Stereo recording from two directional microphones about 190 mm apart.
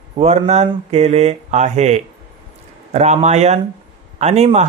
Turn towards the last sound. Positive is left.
turn(degrees=-35)  # may be behind; listen again after turning